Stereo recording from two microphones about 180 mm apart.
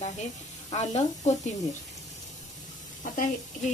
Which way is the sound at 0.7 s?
40° left (ahead or behind).